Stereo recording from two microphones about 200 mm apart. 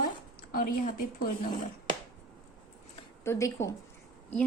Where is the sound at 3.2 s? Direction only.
15° left (ahead or behind).